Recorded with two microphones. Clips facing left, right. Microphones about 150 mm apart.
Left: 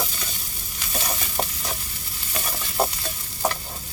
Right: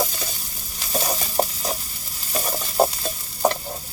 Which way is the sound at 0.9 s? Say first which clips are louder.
Right 6 dB; 35° right (ahead or behind).